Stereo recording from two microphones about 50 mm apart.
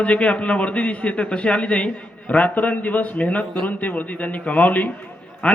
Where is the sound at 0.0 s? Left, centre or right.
Left.